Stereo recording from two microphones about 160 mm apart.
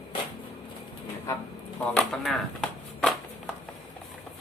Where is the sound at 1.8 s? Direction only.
5° left (ahead or behind).